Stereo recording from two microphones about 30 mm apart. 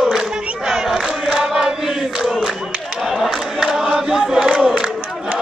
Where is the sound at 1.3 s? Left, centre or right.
Right.